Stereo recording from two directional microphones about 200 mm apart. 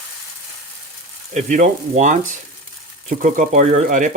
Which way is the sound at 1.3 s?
40° right (ahead or behind).